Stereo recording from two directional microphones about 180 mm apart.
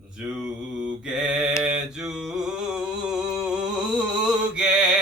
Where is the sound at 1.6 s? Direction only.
5° right (ahead or behind).